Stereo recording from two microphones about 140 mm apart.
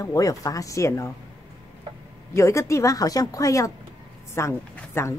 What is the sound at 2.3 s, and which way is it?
Speech, 20° left (ahead or behind).